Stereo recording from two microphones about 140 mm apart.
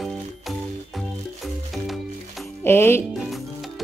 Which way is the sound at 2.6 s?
15° left (ahead or behind).